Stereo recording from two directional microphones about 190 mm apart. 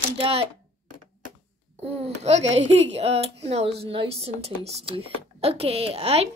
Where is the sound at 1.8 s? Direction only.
35° right (ahead or behind).